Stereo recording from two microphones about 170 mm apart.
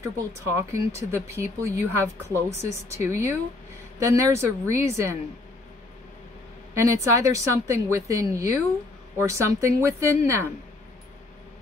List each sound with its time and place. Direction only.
0.0 s speech: 15° right (ahead or behind)
6.7 s a woman's voice: 15° right (ahead or behind)